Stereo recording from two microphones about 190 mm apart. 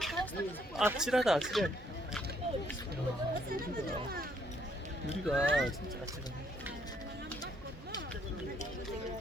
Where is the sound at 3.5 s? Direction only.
50° right (ahead or behind).